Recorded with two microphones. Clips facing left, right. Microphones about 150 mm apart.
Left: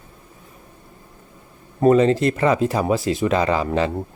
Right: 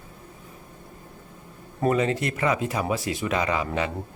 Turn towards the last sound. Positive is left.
turn(degrees=30)  # may be behind; listen again after turning